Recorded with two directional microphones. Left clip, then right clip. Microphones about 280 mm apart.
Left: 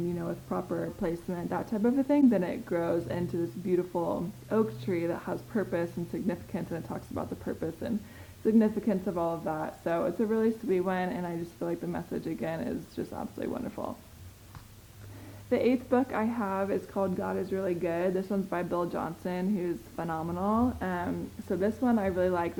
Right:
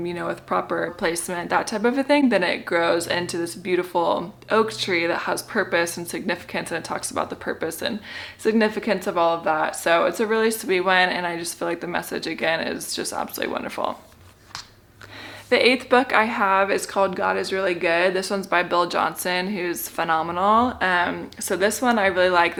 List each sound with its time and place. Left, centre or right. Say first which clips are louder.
0.2 s a woman's voice: right 11 dB; centre
3.9 s speech: right 10 dB; right
4.4 s a woman's voice: right 9 dB; centre
15.4 s a woman's voice: right 10 dB; centre